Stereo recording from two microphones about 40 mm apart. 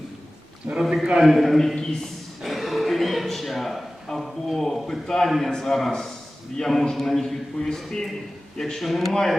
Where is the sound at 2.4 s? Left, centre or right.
Centre.